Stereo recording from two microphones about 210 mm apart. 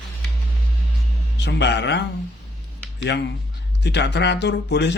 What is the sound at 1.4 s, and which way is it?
Speech, 55° left (ahead or behind).